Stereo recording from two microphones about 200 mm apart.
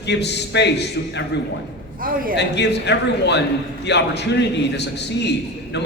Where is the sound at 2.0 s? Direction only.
45° right (ahead or behind).